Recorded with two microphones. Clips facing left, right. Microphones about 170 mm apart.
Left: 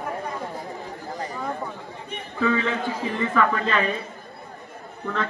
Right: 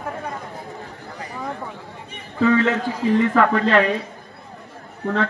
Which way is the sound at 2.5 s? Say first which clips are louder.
Right 6 dB; 85° right.